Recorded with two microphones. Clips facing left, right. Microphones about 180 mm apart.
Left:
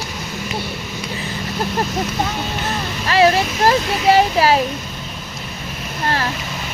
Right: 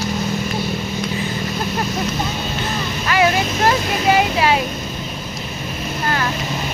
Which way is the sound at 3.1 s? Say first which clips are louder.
Left 3 dB; 30° left (ahead or behind).